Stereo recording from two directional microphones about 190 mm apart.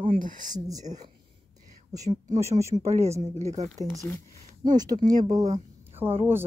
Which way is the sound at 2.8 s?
35° right (ahead or behind).